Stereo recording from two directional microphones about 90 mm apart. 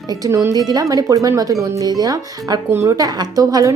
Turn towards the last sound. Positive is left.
turn(degrees=-40)  # may be behind; listen again after turning